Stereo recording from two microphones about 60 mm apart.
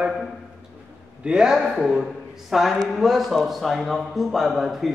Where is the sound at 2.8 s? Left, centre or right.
Centre.